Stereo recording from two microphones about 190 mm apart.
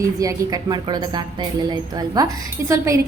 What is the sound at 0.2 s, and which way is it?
A woman's voice, 20° right (ahead or behind).